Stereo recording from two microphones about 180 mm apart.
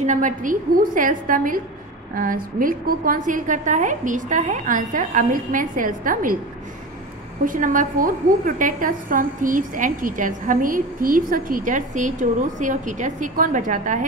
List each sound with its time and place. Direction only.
0.0 s a woman's voice: 45° right (ahead or behind)
7.4 s a woman's voice: 50° right (ahead or behind)